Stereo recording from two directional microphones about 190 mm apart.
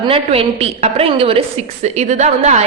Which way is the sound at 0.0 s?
30° right (ahead or behind).